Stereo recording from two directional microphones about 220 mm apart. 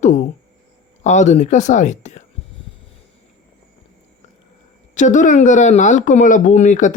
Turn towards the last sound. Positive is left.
turn(degrees=35)  # may be behind; listen again after turning